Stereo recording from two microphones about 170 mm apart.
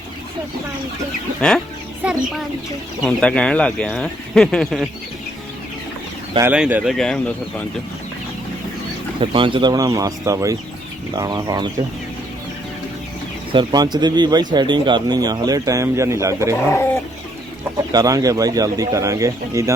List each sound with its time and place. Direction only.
1.4 s speech: 5° left (ahead or behind)
3.0 s speech: 5° left (ahead or behind)
6.4 s speech: 10° right (ahead or behind)
6.9 s speech: 5° left (ahead or behind)
9.2 s speech: 30° right (ahead or behind)
13.5 s speech: 30° right (ahead or behind)
17.9 s speech: 20° right (ahead or behind)